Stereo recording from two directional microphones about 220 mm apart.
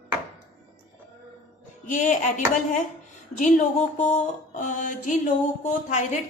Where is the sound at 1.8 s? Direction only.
35° left (ahead or behind).